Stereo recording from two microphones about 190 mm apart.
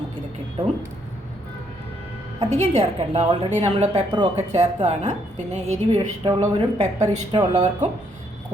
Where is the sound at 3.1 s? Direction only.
30° right (ahead or behind).